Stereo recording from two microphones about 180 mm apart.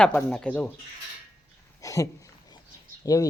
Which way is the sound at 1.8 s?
20° left (ahead or behind).